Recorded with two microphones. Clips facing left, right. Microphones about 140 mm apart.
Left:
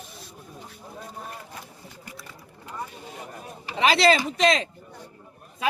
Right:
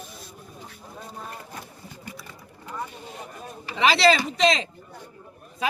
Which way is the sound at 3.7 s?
45° left (ahead or behind).